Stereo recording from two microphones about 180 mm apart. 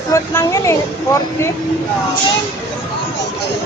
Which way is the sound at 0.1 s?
15° left (ahead or behind).